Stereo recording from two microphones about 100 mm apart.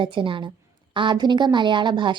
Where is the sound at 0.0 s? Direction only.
55° right (ahead or behind).